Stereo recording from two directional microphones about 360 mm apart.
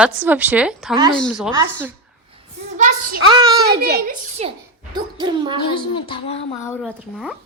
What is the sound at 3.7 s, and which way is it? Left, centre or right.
Speech, right.